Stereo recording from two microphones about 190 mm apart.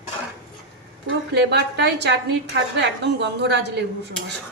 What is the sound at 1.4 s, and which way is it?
A woman's voice, 65° right (ahead or behind).